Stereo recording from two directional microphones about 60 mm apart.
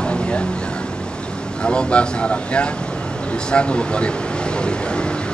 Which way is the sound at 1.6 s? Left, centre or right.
Centre.